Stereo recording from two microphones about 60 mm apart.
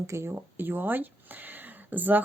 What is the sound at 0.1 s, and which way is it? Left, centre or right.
Speech, right.